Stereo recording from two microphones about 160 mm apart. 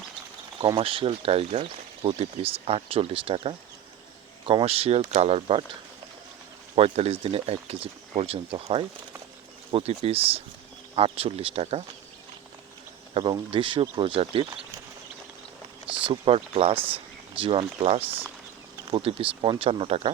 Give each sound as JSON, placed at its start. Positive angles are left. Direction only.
{"t": 0.6, "sound": "speech", "side_deg": -35}
{"t": 6.7, "sound": "speech", "side_deg": -40}
{"t": 13.1, "sound": "speech", "side_deg": -30}
{"t": 15.9, "sound": "speech", "side_deg": -35}